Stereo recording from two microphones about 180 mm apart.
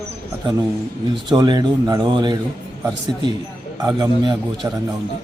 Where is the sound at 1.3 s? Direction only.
25° right (ahead or behind).